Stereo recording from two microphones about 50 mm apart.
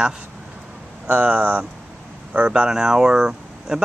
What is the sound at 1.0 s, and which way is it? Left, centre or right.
Speech, right.